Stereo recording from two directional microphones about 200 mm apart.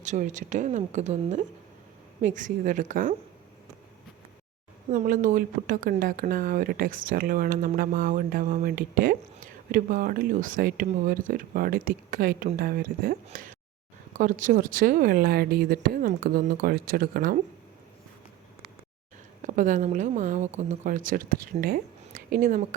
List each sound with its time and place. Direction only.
0.0 s speech: 35° right (ahead or behind)
4.9 s speech: 40° right (ahead or behind)
19.4 s speech: 40° right (ahead or behind)